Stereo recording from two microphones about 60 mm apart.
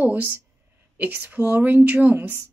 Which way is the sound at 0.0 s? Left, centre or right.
Right.